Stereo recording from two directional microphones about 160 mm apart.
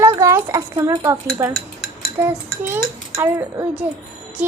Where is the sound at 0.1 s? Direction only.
20° right (ahead or behind).